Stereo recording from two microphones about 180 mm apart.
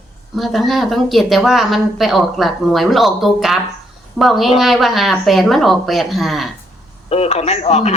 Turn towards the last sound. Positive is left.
turn(degrees=35)  # may be behind; listen again after turning